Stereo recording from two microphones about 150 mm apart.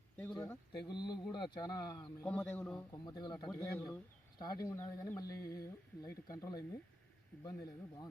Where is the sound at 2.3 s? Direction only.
10° left (ahead or behind).